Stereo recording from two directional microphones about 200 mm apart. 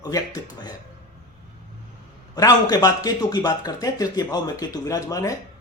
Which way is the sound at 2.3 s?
20° left (ahead or behind).